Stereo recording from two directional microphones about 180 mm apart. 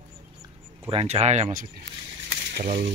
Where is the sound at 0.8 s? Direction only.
30° right (ahead or behind).